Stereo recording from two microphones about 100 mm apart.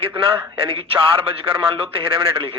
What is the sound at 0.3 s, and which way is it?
A man's voice, 65° right (ahead or behind).